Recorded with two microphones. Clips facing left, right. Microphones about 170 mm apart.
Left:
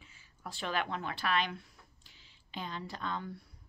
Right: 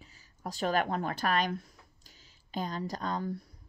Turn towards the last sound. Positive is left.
turn(degrees=-40)  # may be behind; listen again after turning